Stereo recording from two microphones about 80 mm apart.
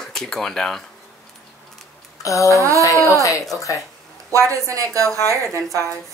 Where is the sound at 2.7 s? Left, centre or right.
Left.